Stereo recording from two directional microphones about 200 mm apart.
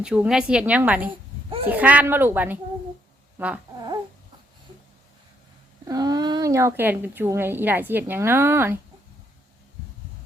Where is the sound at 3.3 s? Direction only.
5° right (ahead or behind).